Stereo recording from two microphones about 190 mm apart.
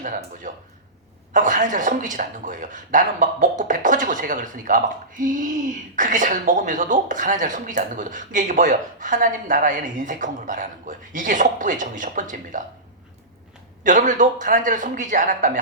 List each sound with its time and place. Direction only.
0.0 s speech: 45° right (ahead or behind)
13.8 s speech: 40° right (ahead or behind)